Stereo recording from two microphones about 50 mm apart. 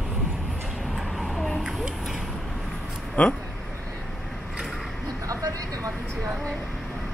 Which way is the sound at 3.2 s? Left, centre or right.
Left.